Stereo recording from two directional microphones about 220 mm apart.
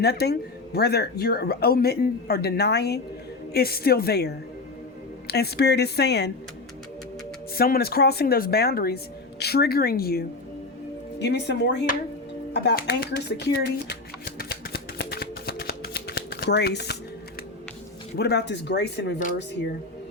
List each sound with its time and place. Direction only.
0.0 s speech: 50° left (ahead or behind)
7.5 s speech: 45° left (ahead or behind)
12.5 s shuffling cards: 45° left (ahead or behind)
18.2 s speech: 50° left (ahead or behind)